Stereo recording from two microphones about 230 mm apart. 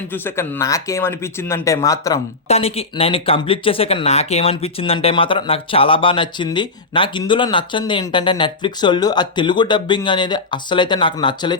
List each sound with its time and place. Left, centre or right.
0.1 s speech: centre
2.5 s speech: left